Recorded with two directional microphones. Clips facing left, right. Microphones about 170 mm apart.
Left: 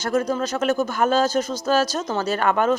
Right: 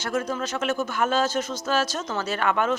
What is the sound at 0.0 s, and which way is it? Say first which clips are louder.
A man's voice: left 5 dB; 35° left (ahead or behind).